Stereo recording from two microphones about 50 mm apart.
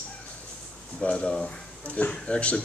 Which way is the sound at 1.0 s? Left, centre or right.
Left.